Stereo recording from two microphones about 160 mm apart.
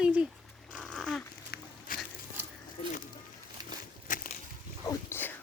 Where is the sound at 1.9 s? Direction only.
60° left (ahead or behind).